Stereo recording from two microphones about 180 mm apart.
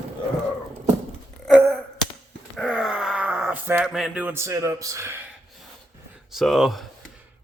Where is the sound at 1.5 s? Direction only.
5° right (ahead or behind).